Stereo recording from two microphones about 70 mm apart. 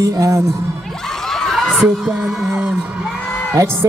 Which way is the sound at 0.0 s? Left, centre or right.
Right.